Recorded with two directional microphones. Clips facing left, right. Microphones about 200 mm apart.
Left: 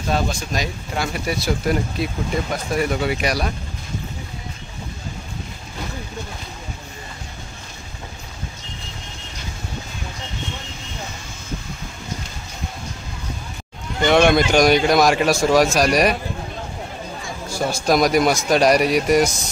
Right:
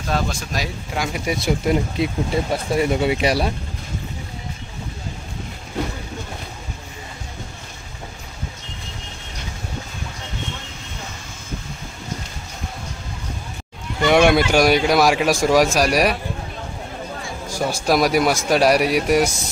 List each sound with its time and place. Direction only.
0.1 s speech: centre (ahead or behind)
0.9 s speech: 15° right (ahead or behind)
14.0 s speech: 10° right (ahead or behind)
17.5 s speech: 10° right (ahead or behind)